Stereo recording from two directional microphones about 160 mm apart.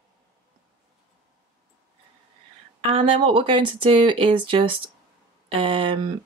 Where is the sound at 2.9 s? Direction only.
35° right (ahead or behind).